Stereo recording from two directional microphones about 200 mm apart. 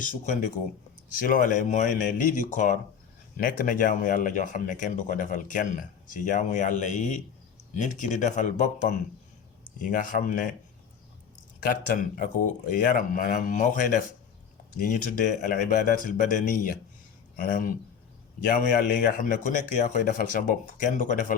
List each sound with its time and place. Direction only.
0.0 s speech: 40° left (ahead or behind)
11.6 s speech: 45° left (ahead or behind)